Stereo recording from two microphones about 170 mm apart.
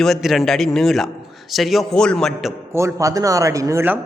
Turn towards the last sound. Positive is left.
turn(degrees=-15)  # may be behind; listen again after turning